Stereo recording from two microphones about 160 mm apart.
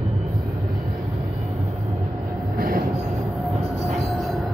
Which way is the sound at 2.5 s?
65° right (ahead or behind).